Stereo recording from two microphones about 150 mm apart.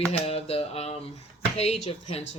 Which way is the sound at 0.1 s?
40° left (ahead or behind).